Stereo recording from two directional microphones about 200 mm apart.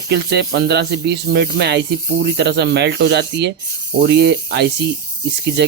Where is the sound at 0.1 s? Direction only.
55° right (ahead or behind).